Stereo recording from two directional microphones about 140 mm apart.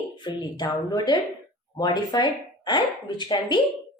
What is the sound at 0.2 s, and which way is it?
A woman's voice, 30° left (ahead or behind).